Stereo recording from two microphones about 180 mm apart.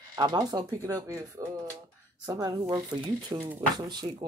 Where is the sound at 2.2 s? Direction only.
20° right (ahead or behind).